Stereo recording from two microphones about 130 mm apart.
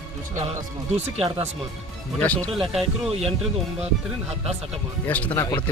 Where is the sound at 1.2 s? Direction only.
50° right (ahead or behind).